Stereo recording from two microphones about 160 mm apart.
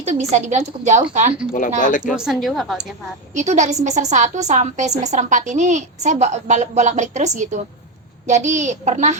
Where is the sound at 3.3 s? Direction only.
50° right (ahead or behind).